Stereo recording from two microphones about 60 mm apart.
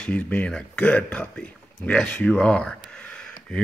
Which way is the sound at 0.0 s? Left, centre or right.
Left.